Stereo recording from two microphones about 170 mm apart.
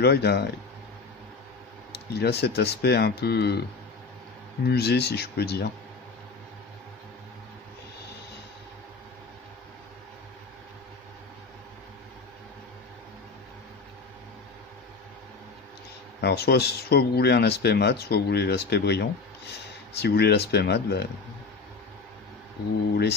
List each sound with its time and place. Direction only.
0.0 s speech: 75° left (ahead or behind)
1.9 s speech: 75° left (ahead or behind)
4.6 s speech: 70° left (ahead or behind)
16.2 s speech: 75° left (ahead or behind)